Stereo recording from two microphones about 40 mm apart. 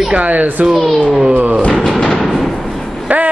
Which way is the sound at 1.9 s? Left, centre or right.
Centre.